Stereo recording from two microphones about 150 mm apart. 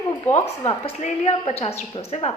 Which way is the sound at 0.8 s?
45° left (ahead or behind).